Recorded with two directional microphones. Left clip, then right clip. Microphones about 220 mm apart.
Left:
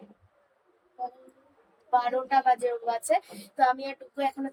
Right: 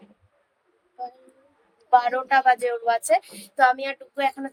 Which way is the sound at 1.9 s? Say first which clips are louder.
Right 6 dB; 5° right (ahead or behind).